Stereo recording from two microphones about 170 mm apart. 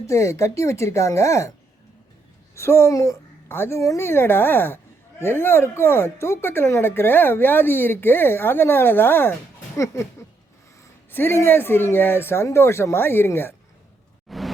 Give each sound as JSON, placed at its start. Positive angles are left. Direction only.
{"t": 0.1, "sound": "speech", "side_deg": 15}
{"t": 2.6, "sound": "speech", "side_deg": 15}
{"t": 11.1, "sound": "speech", "side_deg": 15}
{"t": 14.3, "sound": "a sound", "side_deg": 0}